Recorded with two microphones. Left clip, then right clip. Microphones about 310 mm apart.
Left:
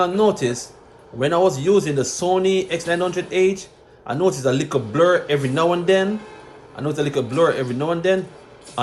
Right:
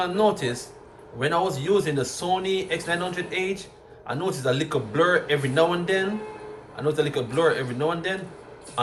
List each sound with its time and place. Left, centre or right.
0.0 s speech: left